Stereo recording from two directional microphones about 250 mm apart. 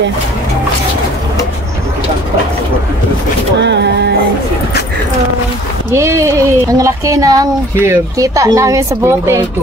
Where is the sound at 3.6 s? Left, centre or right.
Right.